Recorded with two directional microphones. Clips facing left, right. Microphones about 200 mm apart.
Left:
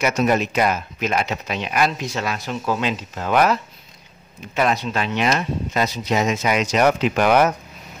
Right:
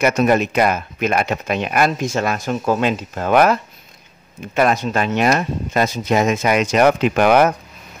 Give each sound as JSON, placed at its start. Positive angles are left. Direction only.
{"t": 0.0, "sound": "speech", "side_deg": -55}
{"t": 4.6, "sound": "speech", "side_deg": -50}